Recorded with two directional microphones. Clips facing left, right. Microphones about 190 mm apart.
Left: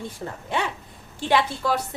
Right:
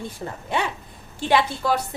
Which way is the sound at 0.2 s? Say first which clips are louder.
Right 1 dB; 20° right (ahead or behind).